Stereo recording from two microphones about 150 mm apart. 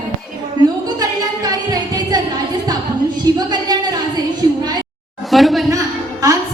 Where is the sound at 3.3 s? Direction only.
25° right (ahead or behind).